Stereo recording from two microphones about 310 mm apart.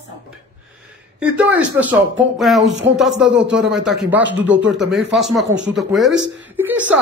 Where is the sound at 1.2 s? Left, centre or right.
Centre.